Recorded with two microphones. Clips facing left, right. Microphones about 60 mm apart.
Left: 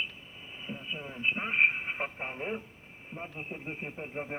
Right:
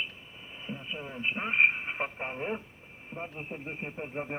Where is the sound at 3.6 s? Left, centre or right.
Centre.